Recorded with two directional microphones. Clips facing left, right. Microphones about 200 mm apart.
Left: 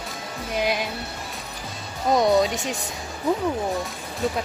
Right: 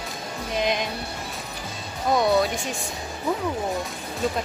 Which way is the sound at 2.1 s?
20° left (ahead or behind).